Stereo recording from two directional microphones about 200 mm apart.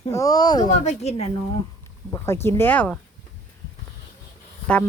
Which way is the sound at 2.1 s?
10° left (ahead or behind).